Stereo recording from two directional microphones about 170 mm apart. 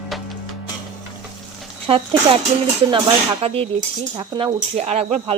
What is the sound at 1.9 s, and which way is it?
Speech, 30° right (ahead or behind).